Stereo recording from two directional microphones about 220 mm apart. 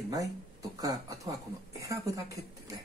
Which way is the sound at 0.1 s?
15° right (ahead or behind).